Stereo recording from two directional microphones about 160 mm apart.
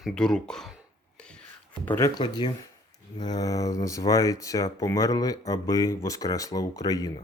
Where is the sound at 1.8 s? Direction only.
15° left (ahead or behind).